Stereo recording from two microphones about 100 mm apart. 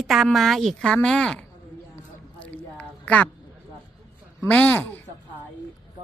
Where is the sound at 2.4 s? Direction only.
15° left (ahead or behind).